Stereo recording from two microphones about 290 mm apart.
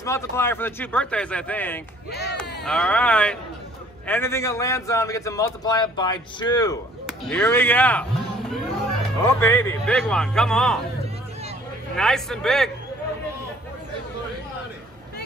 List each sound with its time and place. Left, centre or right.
0.0 s a man's voice: centre
7.1 s speech: centre
9.2 s speech: centre
12.0 s speech: centre